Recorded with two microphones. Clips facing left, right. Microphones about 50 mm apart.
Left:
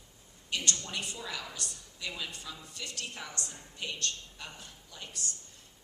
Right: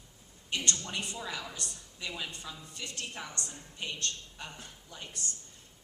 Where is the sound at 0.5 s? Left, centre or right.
Right.